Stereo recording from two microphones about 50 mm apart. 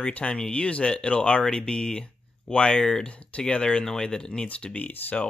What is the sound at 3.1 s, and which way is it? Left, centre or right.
Speech, left.